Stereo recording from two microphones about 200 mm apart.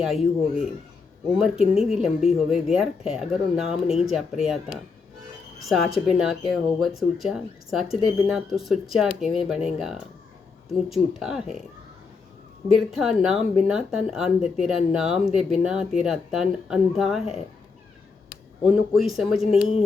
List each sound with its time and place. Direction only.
0.0 s speech: centre (ahead or behind)
1.4 s speech: 5° right (ahead or behind)
5.6 s speech: centre (ahead or behind)
12.7 s speech: centre (ahead or behind)
18.6 s speech: 5° right (ahead or behind)